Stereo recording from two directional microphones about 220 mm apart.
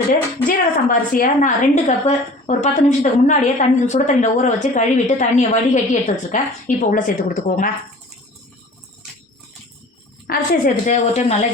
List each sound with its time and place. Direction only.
0.4 s a woman's voice: 40° left (ahead or behind)
10.2 s a woman's voice: 40° left (ahead or behind)